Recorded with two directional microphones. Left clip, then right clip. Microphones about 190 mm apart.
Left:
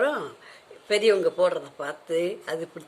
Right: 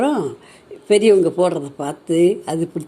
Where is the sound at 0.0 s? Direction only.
15° right (ahead or behind).